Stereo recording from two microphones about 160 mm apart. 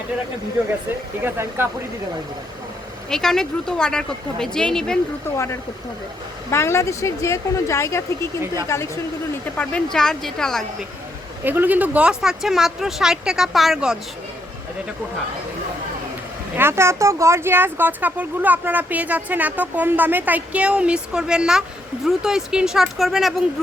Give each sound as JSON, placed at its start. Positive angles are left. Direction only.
{"t": 1.2, "sound": "speech", "side_deg": -15}
{"t": 3.1, "sound": "speech", "side_deg": 5}
{"t": 6.5, "sound": "speech", "side_deg": 15}
{"t": 9.6, "sound": "speech", "side_deg": 5}
{"t": 11.4, "sound": "speech", "side_deg": -10}
{"t": 16.6, "sound": "speech", "side_deg": -15}